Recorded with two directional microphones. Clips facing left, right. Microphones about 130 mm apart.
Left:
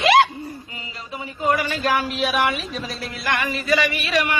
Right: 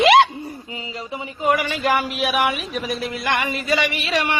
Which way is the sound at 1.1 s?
15° right (ahead or behind).